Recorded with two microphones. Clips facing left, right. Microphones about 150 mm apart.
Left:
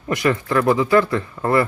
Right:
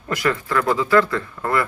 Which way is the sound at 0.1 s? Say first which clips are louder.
Left 3 dB; 20° left (ahead or behind).